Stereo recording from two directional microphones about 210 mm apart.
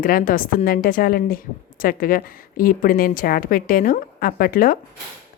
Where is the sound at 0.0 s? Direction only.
40° left (ahead or behind).